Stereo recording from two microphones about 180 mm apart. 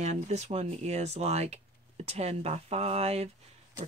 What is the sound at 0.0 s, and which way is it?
Speech, 40° right (ahead or behind).